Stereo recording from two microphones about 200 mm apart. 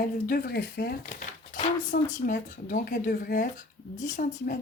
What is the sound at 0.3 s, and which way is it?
Speech, 50° left (ahead or behind).